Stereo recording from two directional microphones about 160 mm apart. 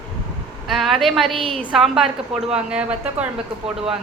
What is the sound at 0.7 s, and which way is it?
Speech, centre (ahead or behind).